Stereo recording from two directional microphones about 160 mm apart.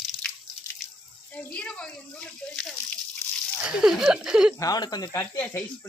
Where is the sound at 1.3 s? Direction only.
5° left (ahead or behind).